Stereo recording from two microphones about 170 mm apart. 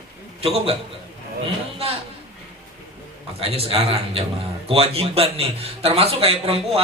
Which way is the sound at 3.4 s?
35° right (ahead or behind).